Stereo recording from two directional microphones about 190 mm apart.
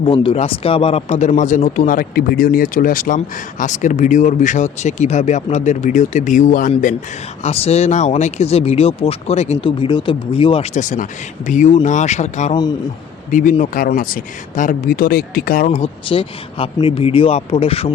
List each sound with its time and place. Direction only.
0.0 s speech: 30° left (ahead or behind); by 6.9 s 45° left (ahead or behind)
7.4 s speech: 35° left (ahead or behind)
16.0 s speech: 30° left (ahead or behind)